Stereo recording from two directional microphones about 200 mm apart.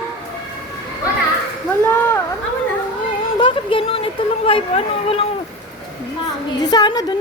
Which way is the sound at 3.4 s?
25° left (ahead or behind).